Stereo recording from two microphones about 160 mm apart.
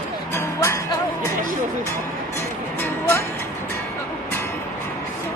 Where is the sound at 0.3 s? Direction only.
15° left (ahead or behind).